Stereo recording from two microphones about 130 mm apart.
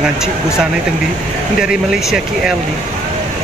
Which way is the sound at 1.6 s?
5° right (ahead or behind).